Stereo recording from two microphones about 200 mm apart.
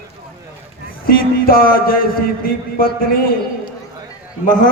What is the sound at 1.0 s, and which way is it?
A man's voice, 45° left (ahead or behind).